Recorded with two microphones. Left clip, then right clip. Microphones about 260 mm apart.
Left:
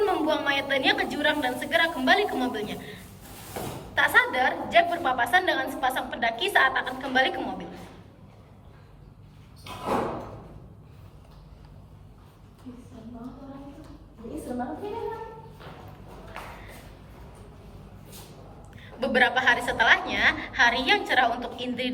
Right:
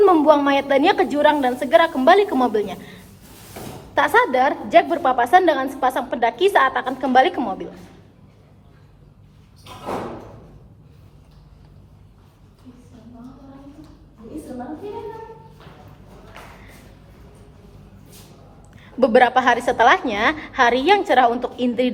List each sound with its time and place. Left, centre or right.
0.0 s a woman's voice: centre
18.8 s a woman's voice: centre